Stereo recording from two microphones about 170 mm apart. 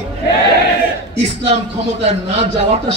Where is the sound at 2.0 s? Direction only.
40° right (ahead or behind).